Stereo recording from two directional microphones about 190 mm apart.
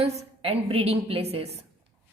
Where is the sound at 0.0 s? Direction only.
30° right (ahead or behind).